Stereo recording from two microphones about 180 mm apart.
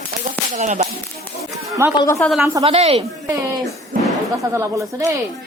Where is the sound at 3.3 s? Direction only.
20° right (ahead or behind).